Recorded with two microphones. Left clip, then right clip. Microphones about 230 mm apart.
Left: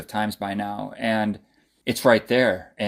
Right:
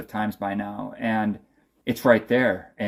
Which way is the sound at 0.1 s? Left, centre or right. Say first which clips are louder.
Left 1 dB; left.